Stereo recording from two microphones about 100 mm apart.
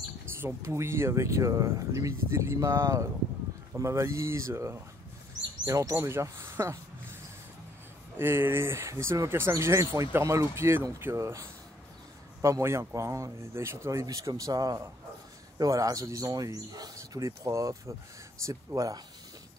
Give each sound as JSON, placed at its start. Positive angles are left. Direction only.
{"t": 0.6, "sound": "speech", "side_deg": -30}
{"t": 8.2, "sound": "speech", "side_deg": -25}